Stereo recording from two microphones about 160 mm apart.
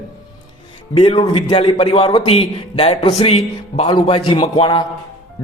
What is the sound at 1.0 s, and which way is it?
A man's voice, 30° left (ahead or behind).